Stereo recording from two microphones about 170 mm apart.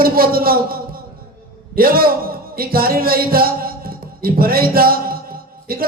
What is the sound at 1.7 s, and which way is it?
A man's voice, 60° right (ahead or behind).